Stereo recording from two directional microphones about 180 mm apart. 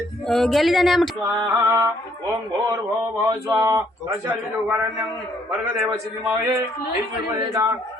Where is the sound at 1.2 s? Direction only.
15° right (ahead or behind).